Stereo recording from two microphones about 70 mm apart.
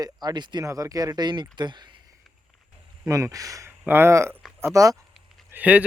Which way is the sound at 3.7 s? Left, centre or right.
Right.